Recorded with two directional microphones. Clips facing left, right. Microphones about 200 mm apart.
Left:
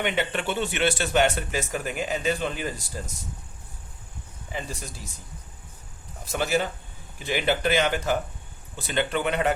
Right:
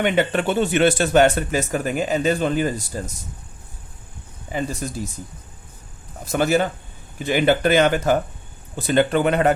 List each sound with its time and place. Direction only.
0.0 s speech: 45° right (ahead or behind)
6.3 s speech: 50° right (ahead or behind)